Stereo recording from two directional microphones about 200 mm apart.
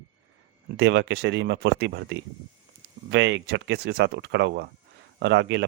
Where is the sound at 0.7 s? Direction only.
60° right (ahead or behind).